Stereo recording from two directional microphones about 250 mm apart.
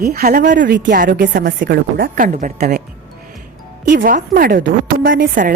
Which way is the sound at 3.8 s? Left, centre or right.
Right.